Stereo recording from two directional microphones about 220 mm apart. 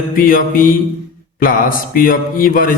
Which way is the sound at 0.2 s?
40° left (ahead or behind).